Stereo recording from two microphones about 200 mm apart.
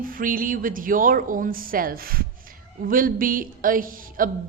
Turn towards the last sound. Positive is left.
turn(degrees=-45)  # may be behind; listen again after turning